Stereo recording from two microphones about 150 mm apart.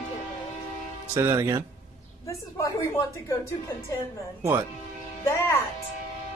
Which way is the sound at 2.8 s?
20° left (ahead or behind).